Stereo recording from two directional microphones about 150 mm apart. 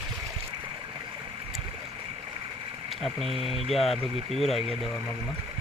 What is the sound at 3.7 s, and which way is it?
Speech, centre (ahead or behind).